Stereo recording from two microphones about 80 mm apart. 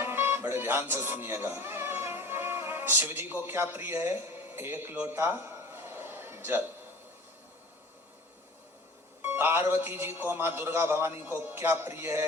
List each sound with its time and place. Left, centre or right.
0.0 s music: right
9.2 s a man's voice: right